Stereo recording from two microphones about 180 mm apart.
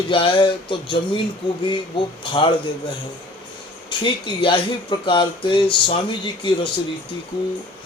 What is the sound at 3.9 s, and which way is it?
Speech, 25° left (ahead or behind).